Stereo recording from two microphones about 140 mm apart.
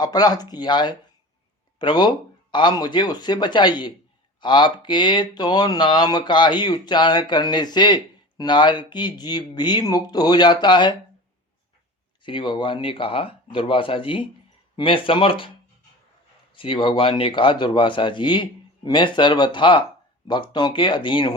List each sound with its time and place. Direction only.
0.0 s speech: 30° left (ahead or behind)
12.2 s speech: 35° left (ahead or behind)
16.6 s speech: 40° left (ahead or behind)